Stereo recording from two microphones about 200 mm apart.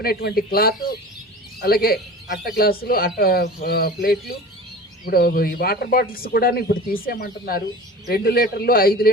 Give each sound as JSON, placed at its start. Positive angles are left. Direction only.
{"t": 0.0, "sound": "speech", "side_deg": 50}